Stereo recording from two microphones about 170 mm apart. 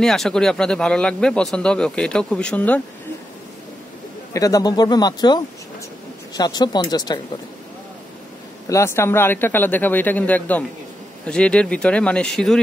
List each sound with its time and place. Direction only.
0.0 s speech: 5° left (ahead or behind)
4.3 s speech: 20° left (ahead or behind)
8.6 s speech: 15° left (ahead or behind)